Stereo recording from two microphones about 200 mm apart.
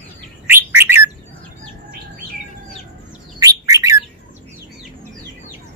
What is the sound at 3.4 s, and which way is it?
Bird, 15° right (ahead or behind).